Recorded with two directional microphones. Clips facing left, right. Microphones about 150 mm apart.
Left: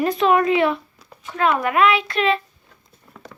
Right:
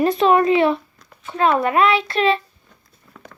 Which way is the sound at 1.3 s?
30° right (ahead or behind).